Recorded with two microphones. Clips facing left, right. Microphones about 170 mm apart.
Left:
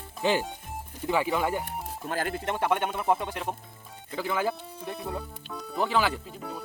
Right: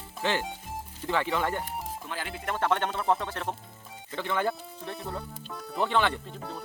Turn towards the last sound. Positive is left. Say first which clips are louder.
# left 1 dB
turn(degrees=5)  # may be behind; listen again after turning